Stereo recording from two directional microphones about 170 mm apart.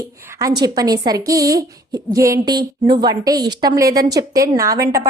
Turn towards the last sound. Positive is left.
turn(degrees=-20)  # may be behind; listen again after turning